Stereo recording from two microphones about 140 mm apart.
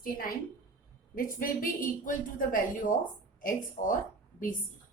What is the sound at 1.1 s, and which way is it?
Speech, 80° left.